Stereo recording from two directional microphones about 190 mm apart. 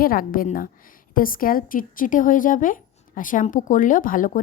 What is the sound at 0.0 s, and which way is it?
A woman's voice, 50° left (ahead or behind).